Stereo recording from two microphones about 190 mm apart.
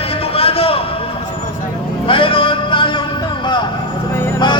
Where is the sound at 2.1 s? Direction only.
25° left (ahead or behind).